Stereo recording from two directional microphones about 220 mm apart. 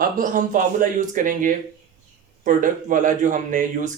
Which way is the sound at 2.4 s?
35° right (ahead or behind).